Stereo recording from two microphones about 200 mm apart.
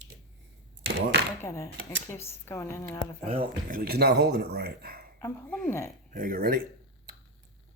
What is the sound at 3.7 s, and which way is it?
Speech, 50° right (ahead or behind).